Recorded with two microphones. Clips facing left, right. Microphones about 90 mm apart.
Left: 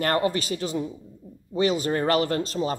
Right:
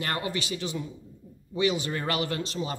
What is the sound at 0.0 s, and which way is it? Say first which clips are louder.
Speech: left 7 dB; 40° left (ahead or behind).